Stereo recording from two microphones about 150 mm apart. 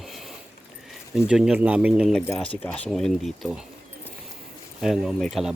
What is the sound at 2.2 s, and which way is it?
Speech, 15° left (ahead or behind).